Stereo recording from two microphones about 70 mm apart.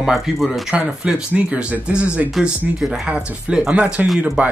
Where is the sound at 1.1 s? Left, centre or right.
Centre.